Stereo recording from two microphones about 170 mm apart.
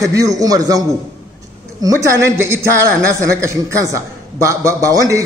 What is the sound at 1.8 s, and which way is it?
A man's voice, 15° right (ahead or behind).